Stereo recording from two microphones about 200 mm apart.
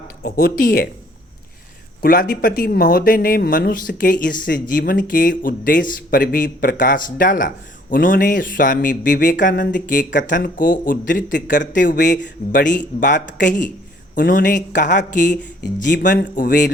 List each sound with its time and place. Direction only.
0.2 s speech: 45° left (ahead or behind)
2.0 s speech: 45° left (ahead or behind)